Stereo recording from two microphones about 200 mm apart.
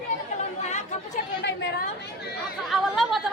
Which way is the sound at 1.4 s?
60° left (ahead or behind).